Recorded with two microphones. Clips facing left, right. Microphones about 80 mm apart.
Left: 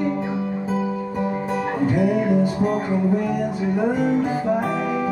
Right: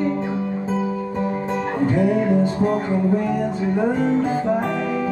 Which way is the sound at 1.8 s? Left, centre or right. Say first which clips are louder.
Right 1 dB; right.